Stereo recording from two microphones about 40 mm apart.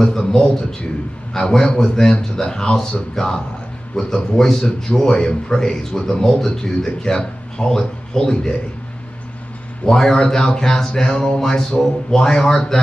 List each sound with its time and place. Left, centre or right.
0.0 s speech: centre
9.8 s speech: centre